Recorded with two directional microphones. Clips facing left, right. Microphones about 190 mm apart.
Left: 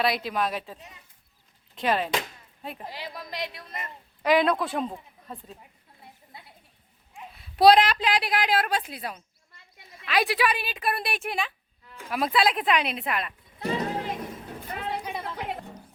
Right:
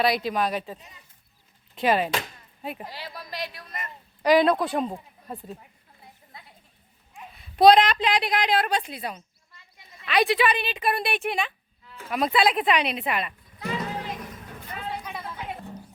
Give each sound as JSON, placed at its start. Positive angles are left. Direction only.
{"t": 0.0, "sound": "speech", "side_deg": 0}
{"t": 2.9, "sound": "a woman's voice", "side_deg": 15}
{"t": 4.2, "sound": "a woman's voice", "side_deg": 0}
{"t": 7.3, "sound": "speech", "side_deg": 0}
{"t": 13.8, "sound": "a sound", "side_deg": 30}